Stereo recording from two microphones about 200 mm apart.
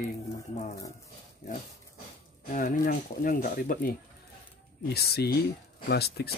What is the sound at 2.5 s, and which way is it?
Speech, 40° left (ahead or behind).